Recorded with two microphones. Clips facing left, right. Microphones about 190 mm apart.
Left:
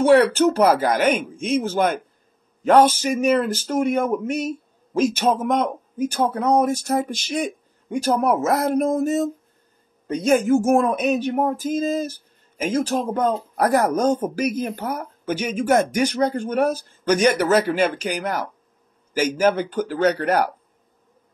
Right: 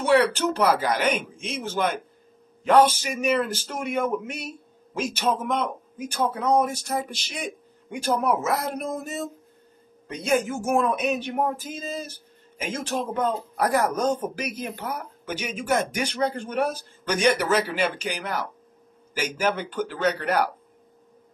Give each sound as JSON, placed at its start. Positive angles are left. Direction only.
{"t": 0.0, "sound": "speech", "side_deg": 45}